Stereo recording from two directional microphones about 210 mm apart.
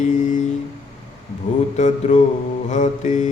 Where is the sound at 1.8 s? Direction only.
35° left (ahead or behind).